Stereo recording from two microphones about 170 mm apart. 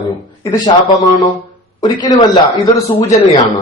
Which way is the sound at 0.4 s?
20° left (ahead or behind).